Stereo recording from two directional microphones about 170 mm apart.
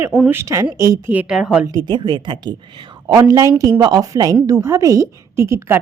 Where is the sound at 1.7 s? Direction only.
25° right (ahead or behind).